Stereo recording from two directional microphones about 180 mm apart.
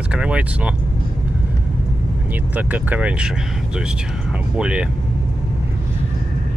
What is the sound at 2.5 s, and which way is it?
Speech, 10° right (ahead or behind).